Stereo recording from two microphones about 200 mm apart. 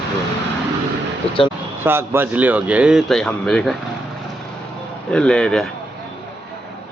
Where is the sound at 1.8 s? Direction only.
10° right (ahead or behind).